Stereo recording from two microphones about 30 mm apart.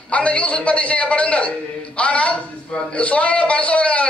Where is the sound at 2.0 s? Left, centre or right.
Left.